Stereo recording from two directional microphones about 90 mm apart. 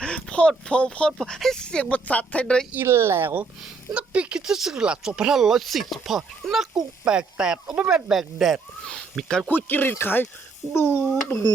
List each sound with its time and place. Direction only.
0.0 s speech: 10° left (ahead or behind)
2.7 s speech: 25° right (ahead or behind)
3.6 s speech: 15° right (ahead or behind)
8.9 s speech: 5° left (ahead or behind)
9.5 s speech: 20° left (ahead or behind)